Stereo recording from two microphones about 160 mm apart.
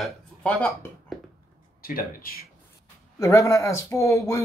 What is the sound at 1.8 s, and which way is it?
Speech, 65° left (ahead or behind).